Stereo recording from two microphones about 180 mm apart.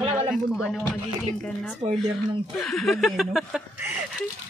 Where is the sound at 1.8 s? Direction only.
30° right (ahead or behind).